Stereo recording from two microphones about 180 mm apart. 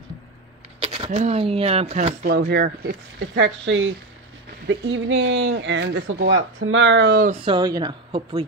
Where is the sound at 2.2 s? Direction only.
55° right (ahead or behind).